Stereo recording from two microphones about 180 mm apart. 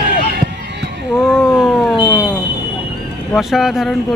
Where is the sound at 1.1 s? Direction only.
5° right (ahead or behind).